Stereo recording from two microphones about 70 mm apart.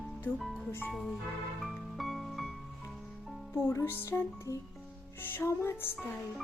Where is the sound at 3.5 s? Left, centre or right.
Left.